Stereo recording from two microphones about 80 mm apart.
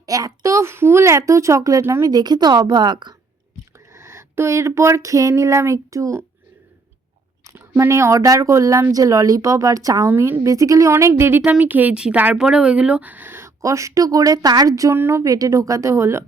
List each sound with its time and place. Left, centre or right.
0.0 s speech: right
2.0 s a woman's voice: right
3.9 s speech: right
7.8 s speech: right
10.1 s speech: right
11.1 s speech: right
14.9 s speech: right
15.2 s speech: right